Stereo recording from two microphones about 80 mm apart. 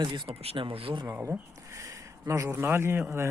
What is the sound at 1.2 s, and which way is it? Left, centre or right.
Speech, right.